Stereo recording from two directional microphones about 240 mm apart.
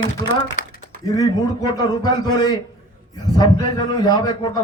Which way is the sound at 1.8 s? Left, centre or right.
Centre.